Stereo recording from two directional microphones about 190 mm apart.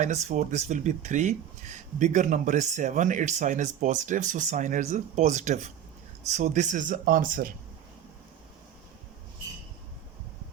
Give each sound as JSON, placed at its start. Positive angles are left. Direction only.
{"t": 0.0, "sound": "speech", "side_deg": -40}